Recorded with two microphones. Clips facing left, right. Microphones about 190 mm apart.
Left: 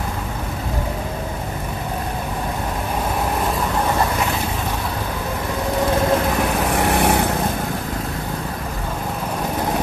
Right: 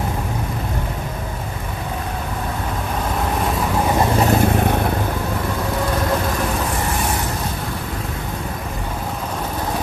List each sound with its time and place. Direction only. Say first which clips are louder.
4.2 s vehicle: right 7 dB; 50° right (ahead or behind)
6.7 s vehicle: left 5 dB; 65° left (ahead or behind)